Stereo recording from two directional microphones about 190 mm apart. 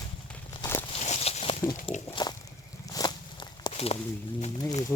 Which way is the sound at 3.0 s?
20° left (ahead or behind).